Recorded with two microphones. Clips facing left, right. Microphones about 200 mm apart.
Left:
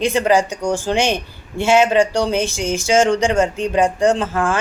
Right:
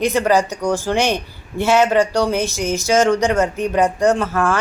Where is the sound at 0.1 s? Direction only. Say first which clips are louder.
Even; 15° left (ahead or behind).